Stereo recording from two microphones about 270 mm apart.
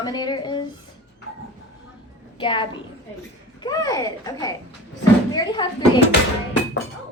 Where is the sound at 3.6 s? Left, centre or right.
Centre.